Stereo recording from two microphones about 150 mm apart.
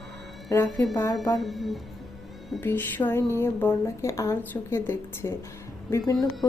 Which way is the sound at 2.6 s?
15° left (ahead or behind).